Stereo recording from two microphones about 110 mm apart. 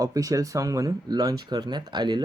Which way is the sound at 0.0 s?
30° right (ahead or behind).